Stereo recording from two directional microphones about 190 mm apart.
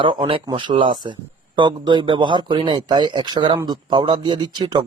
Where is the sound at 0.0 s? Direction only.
25° right (ahead or behind).